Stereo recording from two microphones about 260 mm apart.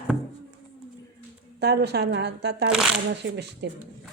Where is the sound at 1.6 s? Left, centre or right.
Right.